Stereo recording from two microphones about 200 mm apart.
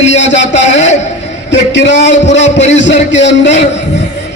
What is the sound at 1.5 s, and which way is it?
A man's voice, 60° left (ahead or behind).